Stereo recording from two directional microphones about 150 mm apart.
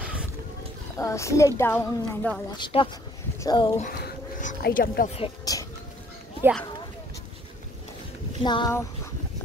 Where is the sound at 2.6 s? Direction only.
35° left (ahead or behind).